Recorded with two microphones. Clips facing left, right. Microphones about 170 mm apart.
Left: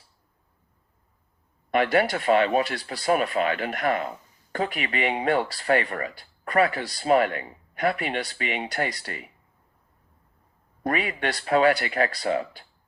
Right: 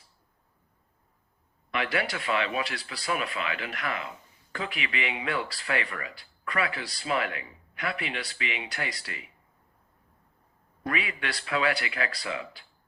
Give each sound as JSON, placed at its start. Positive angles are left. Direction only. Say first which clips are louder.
{"t": 1.7, "sound": "speech", "louder": "left 8 dB", "side_deg": 45}
{"t": 10.8, "sound": "speech", "louder": "left 6 dB", "side_deg": 45}